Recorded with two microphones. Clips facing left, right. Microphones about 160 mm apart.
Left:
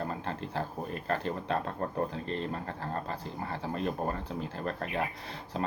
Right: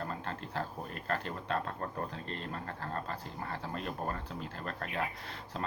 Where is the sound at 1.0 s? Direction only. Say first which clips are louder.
Left 4 dB; 20° left (ahead or behind).